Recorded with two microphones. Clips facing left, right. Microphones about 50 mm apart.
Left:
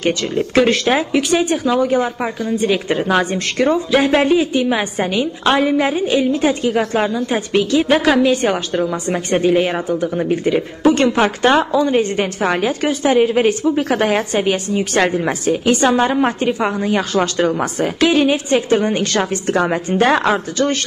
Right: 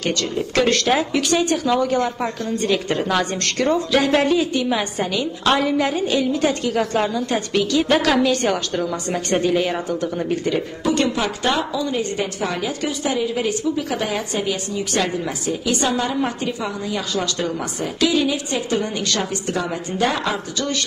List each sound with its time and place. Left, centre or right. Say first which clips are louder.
0.6 s speech: left 3 dB; centre
10.8 s a woman's voice: left 8 dB; left